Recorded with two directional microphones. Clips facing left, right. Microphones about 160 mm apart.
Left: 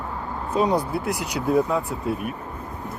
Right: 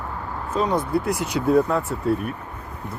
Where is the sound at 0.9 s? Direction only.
Centre (ahead or behind).